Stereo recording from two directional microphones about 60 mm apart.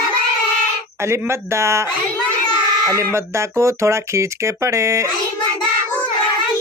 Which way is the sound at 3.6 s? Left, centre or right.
Right.